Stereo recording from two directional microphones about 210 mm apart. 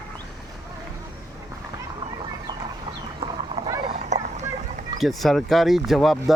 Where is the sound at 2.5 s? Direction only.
25° right (ahead or behind).